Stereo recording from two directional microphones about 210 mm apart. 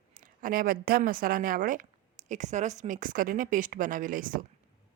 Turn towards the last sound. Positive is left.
turn(degrees=-40)  # may be behind; listen again after turning